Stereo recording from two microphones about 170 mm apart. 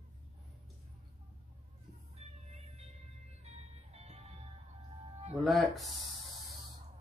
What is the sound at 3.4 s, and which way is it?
Music, 40° right (ahead or behind).